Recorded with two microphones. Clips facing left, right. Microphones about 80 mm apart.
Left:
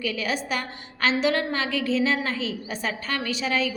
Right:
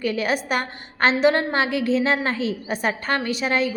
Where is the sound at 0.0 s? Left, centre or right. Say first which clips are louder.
Right 5 dB; right.